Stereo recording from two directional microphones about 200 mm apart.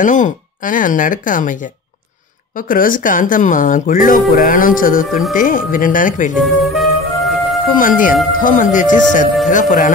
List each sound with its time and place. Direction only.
0.0 s speech: 40° left (ahead or behind)
6.4 s music: centre (ahead or behind)
7.7 s speech: 40° left (ahead or behind)